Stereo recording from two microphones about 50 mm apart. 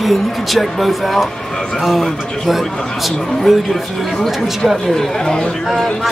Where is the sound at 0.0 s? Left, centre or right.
Centre.